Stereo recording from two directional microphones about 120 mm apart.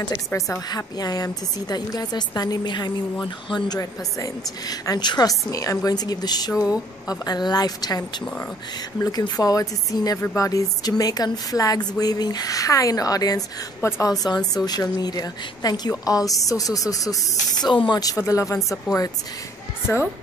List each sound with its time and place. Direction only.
0.1 s a woman's voice: 20° left (ahead or behind)
0.7 s speech: 35° left (ahead or behind)
9.0 s speech: 30° left (ahead or behind)
13.7 s a woman's voice: 20° left (ahead or behind)
14.2 s speech: 35° left (ahead or behind)
18.1 s a woman's voice: 25° left (ahead or behind)
18.6 s speech: centre (ahead or behind)